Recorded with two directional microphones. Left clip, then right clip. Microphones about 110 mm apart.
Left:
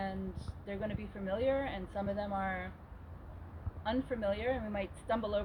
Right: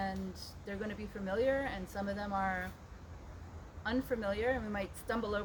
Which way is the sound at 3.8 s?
30° right (ahead or behind).